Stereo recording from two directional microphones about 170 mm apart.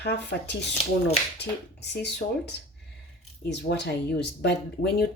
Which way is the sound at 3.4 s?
85° left.